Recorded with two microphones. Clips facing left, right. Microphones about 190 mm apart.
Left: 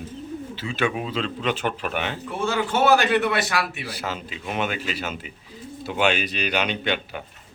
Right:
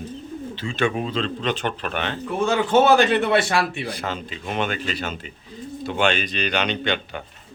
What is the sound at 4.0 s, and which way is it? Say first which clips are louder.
Speech: right 2 dB; 5° left (ahead or behind).